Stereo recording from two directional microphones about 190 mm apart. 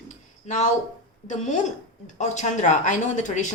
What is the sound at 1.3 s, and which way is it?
A woman's voice, 40° left (ahead or behind).